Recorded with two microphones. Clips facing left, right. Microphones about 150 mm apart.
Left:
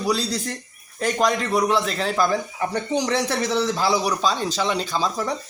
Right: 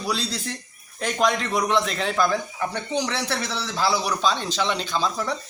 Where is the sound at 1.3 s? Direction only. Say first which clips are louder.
Left 2 dB; 5° left (ahead or behind).